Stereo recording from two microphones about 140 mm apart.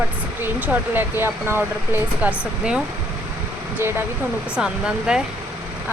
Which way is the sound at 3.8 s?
15° right (ahead or behind).